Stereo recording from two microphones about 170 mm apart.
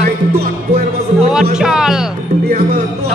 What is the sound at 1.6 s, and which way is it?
Speech, 5° right (ahead or behind).